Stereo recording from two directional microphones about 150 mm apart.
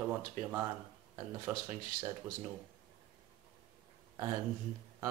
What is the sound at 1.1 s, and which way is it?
Speech, 25° right (ahead or behind).